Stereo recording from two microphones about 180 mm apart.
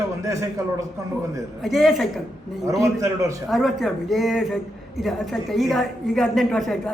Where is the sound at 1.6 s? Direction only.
Centre (ahead or behind).